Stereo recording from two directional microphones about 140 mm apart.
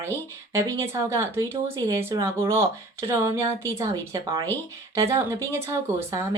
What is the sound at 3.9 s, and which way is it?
A woman's voice, 30° right (ahead or behind).